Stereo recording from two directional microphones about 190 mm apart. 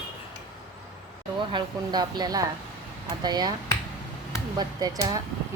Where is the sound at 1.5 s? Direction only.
20° right (ahead or behind).